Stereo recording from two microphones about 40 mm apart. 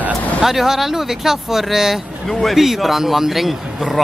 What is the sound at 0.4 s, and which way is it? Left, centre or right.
Speech, centre.